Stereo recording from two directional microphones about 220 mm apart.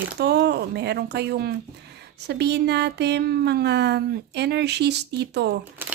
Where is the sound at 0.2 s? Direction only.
50° right (ahead or behind).